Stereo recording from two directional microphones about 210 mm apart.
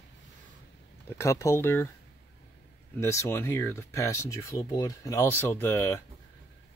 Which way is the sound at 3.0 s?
15° left (ahead or behind).